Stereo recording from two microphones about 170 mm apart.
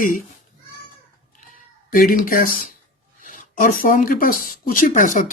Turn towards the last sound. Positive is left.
turn(degrees=50)  # may be behind; listen again after turning